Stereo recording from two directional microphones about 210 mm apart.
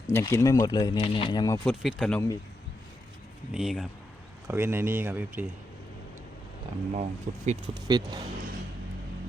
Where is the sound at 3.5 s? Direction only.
Centre (ahead or behind).